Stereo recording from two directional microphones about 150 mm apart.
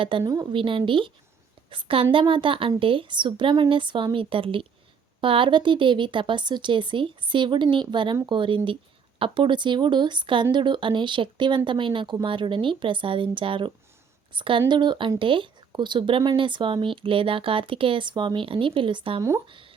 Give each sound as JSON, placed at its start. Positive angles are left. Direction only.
{"t": 0.0, "sound": "speech", "side_deg": -30}